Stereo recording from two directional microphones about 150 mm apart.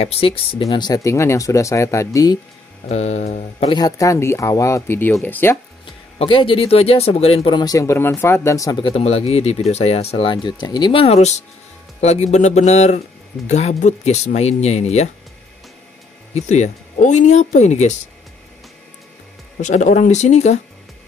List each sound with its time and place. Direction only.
0.0 s speech: 40° left (ahead or behind)
0.8 s speech: 20° left (ahead or behind)
2.9 s speech: 45° left (ahead or behind)
3.7 s speech: 25° left (ahead or behind)
5.9 s speech: 35° left (ahead or behind)
16.3 s speech: 50° left (ahead or behind)
19.6 s speech: 55° left (ahead or behind)